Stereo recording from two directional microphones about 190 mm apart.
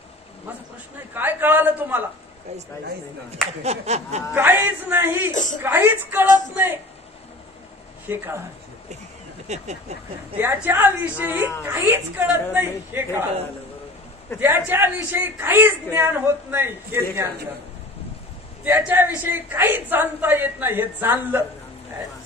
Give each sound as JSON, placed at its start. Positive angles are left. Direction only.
{"t": 1.1, "sound": "a man's voice", "side_deg": -10}
{"t": 3.6, "sound": "a sound", "side_deg": -35}
{"t": 4.3, "sound": "a man's voice", "side_deg": -10}
{"t": 5.3, "sound": "a woman's voice", "side_deg": 40}
{"t": 5.6, "sound": "a man's voice", "side_deg": -10}
{"t": 8.1, "sound": "a man's voice", "side_deg": -10}
{"t": 9.5, "sound": "a sound", "side_deg": -35}
{"t": 10.3, "sound": "a man's voice", "side_deg": -10}
{"t": 14.4, "sound": "a man's voice", "side_deg": -10}
{"t": 18.6, "sound": "a man's voice", "side_deg": -10}